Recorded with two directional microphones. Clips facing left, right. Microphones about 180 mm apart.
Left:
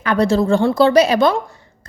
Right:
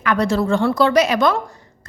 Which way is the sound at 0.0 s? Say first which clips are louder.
Left 3 dB; 30° left (ahead or behind).